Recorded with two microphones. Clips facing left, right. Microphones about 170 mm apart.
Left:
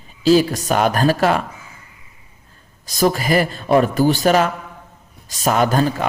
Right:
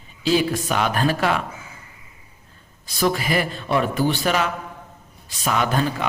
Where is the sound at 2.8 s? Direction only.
40° left (ahead or behind).